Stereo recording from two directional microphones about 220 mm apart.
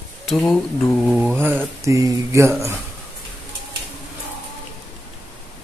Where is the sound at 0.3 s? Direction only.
5° left (ahead or behind); by 2.5 s 15° right (ahead or behind).